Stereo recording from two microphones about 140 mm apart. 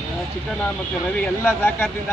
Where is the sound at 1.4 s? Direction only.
15° left (ahead or behind).